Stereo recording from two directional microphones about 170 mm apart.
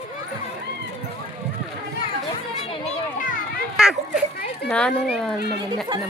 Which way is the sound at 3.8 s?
5° right (ahead or behind).